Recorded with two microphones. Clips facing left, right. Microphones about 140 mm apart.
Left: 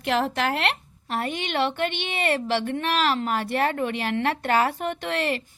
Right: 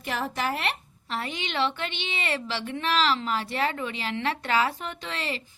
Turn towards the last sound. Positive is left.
turn(degrees=55)  # may be behind; listen again after turning